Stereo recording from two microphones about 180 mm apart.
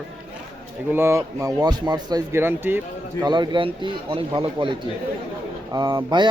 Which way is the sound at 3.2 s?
25° right (ahead or behind).